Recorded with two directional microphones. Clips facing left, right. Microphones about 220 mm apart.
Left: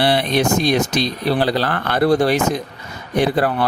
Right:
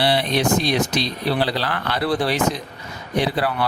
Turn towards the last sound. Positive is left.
turn(degrees=45)  # may be behind; listen again after turning